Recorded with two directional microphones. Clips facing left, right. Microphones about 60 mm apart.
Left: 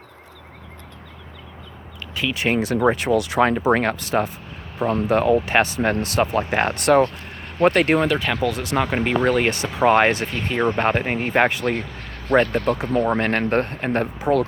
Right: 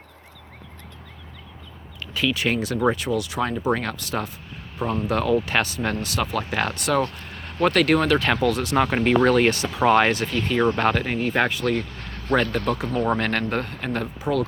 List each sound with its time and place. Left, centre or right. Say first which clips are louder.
2.2 s speech: left 2 dB; left
2.9 s speech: left 5 dB; left
3.6 s speech: left 5 dB; left
6.7 s speech: left 8 dB; left
7.6 s speech: left 2 dB; left
8.1 s speech: right 1 dB; centre; by 11.9 s left
11.9 s speech: left 3 dB; centre
13.5 s speech: left 5 dB; left